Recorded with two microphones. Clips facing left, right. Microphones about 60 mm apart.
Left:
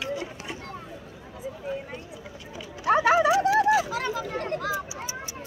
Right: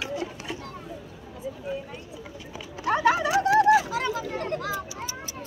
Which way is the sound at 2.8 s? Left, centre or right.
Left.